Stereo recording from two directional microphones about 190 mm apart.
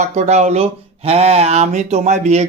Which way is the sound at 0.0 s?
35° right (ahead or behind).